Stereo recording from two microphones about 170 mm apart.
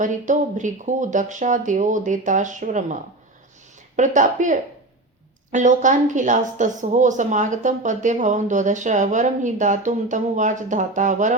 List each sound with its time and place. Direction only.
0.0 s a woman's voice: 45° right (ahead or behind)